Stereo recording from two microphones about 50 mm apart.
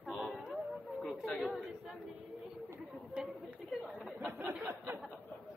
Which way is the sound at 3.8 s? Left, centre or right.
Right.